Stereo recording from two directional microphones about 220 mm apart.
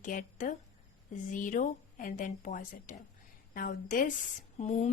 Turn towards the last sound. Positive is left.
turn(degrees=35)  # may be behind; listen again after turning